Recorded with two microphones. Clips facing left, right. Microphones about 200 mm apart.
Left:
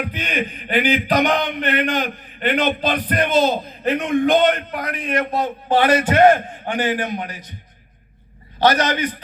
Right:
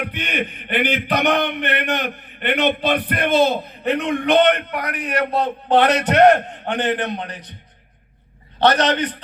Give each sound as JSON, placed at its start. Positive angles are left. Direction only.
{"t": 0.0, "sound": "a man's voice", "side_deg": -65}
{"t": 7.2, "sound": "a man's voice", "side_deg": 10}
{"t": 8.7, "sound": "a man's voice", "side_deg": -65}